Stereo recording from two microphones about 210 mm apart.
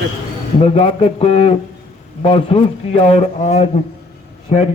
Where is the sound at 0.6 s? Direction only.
25° left (ahead or behind).